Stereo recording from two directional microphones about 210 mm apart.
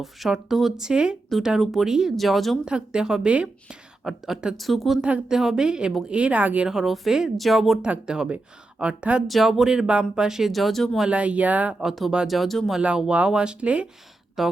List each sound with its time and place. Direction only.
0.0 s speech: centre (ahead or behind)